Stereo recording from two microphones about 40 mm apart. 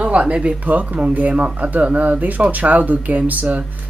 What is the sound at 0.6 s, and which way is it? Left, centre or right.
Speech, right.